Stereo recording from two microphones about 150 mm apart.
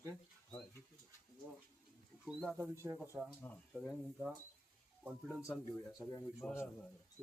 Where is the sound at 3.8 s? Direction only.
Centre (ahead or behind).